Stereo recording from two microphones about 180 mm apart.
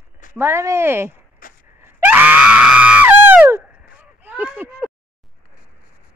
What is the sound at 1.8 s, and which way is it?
Screaming, 10° right (ahead or behind).